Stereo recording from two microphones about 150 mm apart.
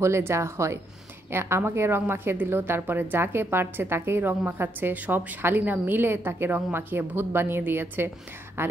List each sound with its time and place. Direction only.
0.0 s a woman's voice: 20° right (ahead or behind)